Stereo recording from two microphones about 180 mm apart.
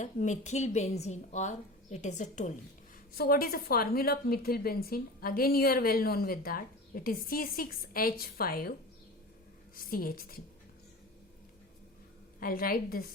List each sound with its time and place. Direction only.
0.0 s a woman's voice: 40° left (ahead or behind)
3.2 s a woman's voice: 55° left (ahead or behind)
9.7 s a woman's voice: 55° left (ahead or behind)
12.4 s a woman's voice: 55° left (ahead or behind)